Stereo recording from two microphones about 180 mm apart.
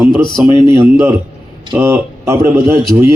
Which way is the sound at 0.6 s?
15° right (ahead or behind).